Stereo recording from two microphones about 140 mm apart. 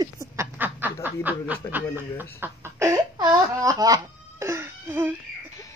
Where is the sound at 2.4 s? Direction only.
20° right (ahead or behind).